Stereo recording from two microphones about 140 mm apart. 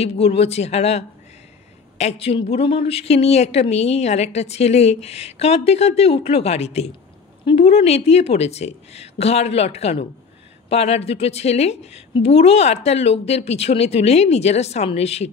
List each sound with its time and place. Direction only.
0.0 s a woman's voice: 45° left (ahead or behind)